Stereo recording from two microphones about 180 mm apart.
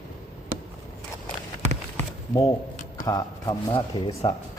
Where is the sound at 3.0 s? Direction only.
20° left (ahead or behind).